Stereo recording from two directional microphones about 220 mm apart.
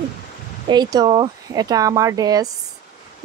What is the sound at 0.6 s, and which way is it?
Speech, 20° right (ahead or behind).